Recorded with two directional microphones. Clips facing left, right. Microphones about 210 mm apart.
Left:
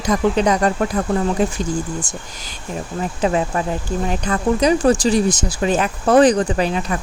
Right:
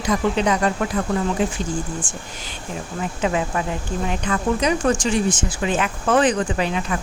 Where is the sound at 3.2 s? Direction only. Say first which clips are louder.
Left 3 dB; 35° left (ahead or behind).